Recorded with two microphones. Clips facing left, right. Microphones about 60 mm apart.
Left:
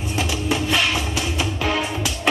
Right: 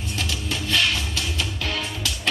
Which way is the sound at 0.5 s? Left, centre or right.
Centre.